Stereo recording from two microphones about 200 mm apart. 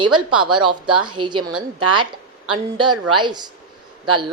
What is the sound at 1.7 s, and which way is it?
Speech, 90° right.